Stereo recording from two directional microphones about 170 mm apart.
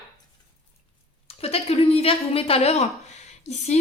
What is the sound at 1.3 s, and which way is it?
Speech, 35° left (ahead or behind).